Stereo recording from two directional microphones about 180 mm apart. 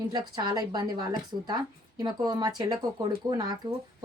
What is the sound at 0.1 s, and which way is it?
Speech, 25° right (ahead or behind).